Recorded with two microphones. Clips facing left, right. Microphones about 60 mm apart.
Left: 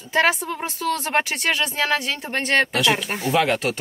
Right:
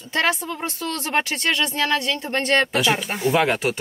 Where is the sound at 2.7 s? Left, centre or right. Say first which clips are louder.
Even; centre.